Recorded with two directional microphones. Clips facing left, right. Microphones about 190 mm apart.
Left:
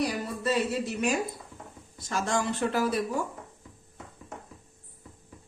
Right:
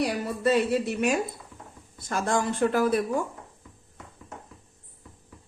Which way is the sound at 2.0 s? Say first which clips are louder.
Right 2 dB; 55° right (ahead or behind).